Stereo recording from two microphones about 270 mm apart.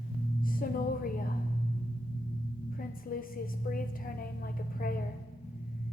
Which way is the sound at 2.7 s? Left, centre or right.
Left.